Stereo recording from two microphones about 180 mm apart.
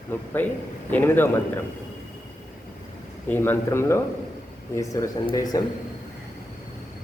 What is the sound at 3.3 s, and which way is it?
Mantra, 10° left (ahead or behind).